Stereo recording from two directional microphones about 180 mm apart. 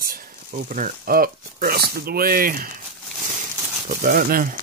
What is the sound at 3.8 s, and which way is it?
Speech, 50° right (ahead or behind).